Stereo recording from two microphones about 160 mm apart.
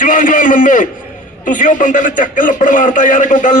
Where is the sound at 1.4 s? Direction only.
55° left (ahead or behind).